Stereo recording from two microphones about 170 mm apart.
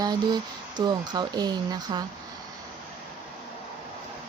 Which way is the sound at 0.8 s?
25° right (ahead or behind).